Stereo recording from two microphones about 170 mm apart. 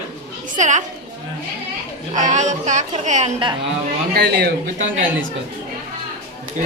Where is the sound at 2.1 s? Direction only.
45° right (ahead or behind).